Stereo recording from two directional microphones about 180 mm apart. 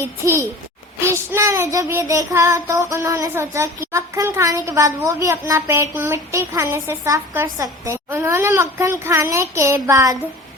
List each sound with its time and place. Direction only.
0.0 s a woman's voice: 15° right (ahead or behind)